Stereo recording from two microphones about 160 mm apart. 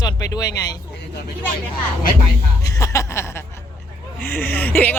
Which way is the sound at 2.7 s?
20° left (ahead or behind).